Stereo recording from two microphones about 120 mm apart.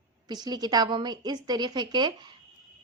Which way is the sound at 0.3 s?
35° right (ahead or behind).